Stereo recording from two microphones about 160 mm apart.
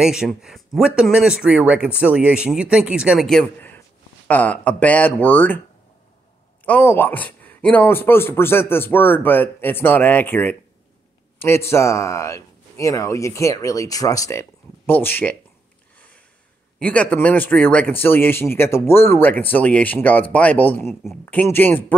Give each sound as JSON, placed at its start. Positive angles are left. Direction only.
{"t": 0.0, "sound": "a man's voice", "side_deg": -5}
{"t": 6.6, "sound": "a man's voice", "side_deg": 10}
{"t": 16.8, "sound": "speech", "side_deg": 10}
{"t": 20.8, "sound": "speech", "side_deg": 0}
{"t": 21.3, "sound": "speech", "side_deg": 10}